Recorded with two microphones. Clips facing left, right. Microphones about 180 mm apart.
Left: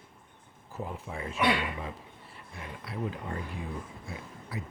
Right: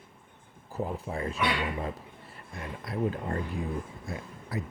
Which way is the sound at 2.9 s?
45° right (ahead or behind).